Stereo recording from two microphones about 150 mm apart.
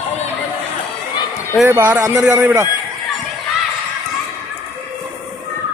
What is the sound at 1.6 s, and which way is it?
A man's voice, 15° right (ahead or behind).